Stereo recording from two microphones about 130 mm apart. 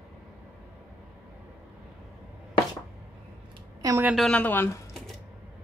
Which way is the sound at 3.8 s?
30° right (ahead or behind).